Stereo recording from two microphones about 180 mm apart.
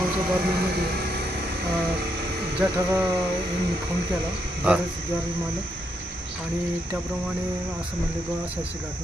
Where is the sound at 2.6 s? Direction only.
15° right (ahead or behind).